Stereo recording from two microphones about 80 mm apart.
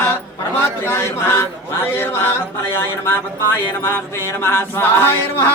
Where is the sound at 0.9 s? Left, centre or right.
Left.